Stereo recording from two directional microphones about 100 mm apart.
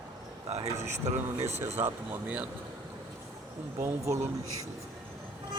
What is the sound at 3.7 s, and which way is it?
Speech, 30° right (ahead or behind).